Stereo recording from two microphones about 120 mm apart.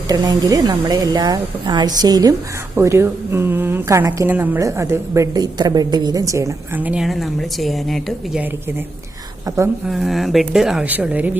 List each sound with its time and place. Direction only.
0.1 s a woman's voice: 30° right (ahead or behind)
2.7 s a woman's voice: 20° right (ahead or behind)
6.7 s speech: 15° right (ahead or behind)
7.0 s a woman's voice: centre (ahead or behind)
9.8 s a woman's voice: centre (ahead or behind)